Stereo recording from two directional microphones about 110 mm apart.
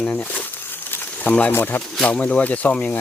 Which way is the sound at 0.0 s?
15° left (ahead or behind).